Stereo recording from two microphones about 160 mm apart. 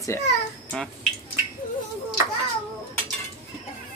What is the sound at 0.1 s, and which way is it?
Speech, 15° left (ahead or behind).